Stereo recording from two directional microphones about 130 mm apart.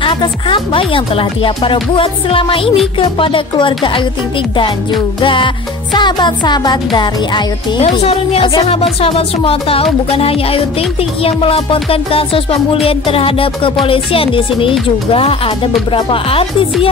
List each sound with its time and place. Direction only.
0.0 s speech: 40° left (ahead or behind)
5.2 s speech: 40° left (ahead or behind)
7.8 s music: 50° left (ahead or behind)